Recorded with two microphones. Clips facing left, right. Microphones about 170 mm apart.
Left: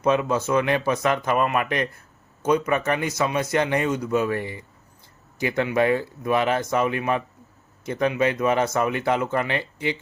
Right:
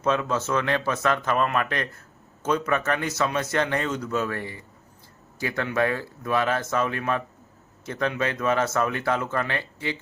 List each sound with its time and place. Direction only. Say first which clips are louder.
0.0 s a man's voice: left 3 dB; 15° left (ahead or behind)